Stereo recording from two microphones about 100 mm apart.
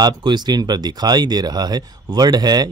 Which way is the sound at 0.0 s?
45° right (ahead or behind).